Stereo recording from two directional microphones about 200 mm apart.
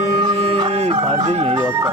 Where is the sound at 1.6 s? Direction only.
15° right (ahead or behind).